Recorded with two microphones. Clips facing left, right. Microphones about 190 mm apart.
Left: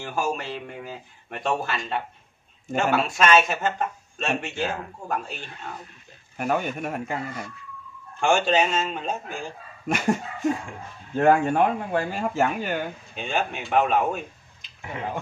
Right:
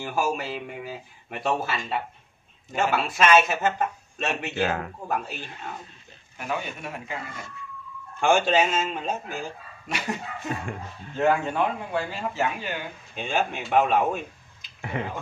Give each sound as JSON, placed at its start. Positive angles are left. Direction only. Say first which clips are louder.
{"t": 0.0, "sound": "speech", "louder": "right 1 dB", "side_deg": -5}
{"t": 4.6, "sound": "speech", "louder": "right 2 dB", "side_deg": -70}
{"t": 5.0, "sound": "speech", "louder": "left 2 dB", "side_deg": -5}
{"t": 6.3, "sound": "speech", "louder": "left 6 dB", "side_deg": 50}
{"t": 8.2, "sound": "speech", "louder": "even", "side_deg": 0}
{"t": 9.8, "sound": "speech", "louder": "left 7 dB", "side_deg": 45}
{"t": 13.1, "sound": "speech", "louder": "right 2 dB", "side_deg": 0}